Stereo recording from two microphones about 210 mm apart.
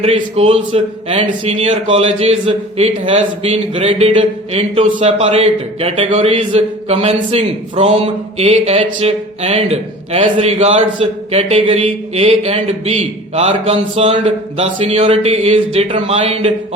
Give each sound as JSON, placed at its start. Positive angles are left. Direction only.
{"t": 0.0, "sound": "a man's voice", "side_deg": -30}